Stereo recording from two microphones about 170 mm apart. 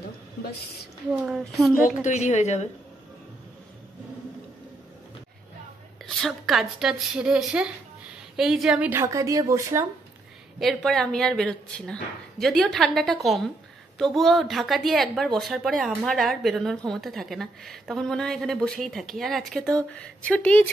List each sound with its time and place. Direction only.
1.1 s a woman's voice: 5° right (ahead or behind)
1.9 s a woman's voice: 45° left (ahead or behind)
6.0 s a woman's voice: centre (ahead or behind); by 9.8 s 20° right (ahead or behind)
10.6 s speech: centre (ahead or behind)